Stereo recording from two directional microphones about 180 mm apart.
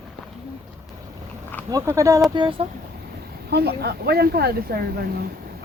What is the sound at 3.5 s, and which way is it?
Speech, 60° right (ahead or behind).